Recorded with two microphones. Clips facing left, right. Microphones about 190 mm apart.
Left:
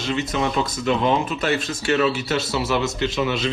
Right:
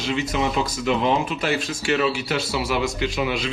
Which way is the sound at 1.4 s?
10° right (ahead or behind).